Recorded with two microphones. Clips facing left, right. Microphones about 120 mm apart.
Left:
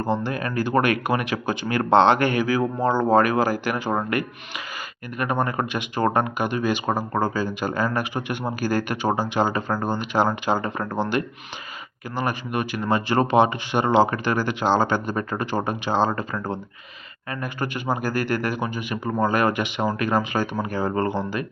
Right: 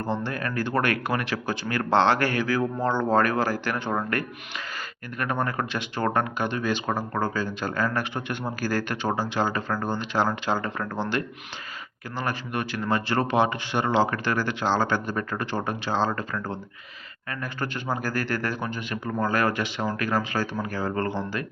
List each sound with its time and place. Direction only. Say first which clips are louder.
0.0 s speech: left 4 dB; 15° left (ahead or behind)